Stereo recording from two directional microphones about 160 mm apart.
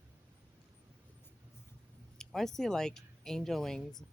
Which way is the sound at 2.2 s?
Centre (ahead or behind).